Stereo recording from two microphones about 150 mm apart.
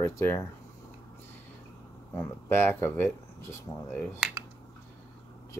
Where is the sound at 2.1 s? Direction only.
15° left (ahead or behind).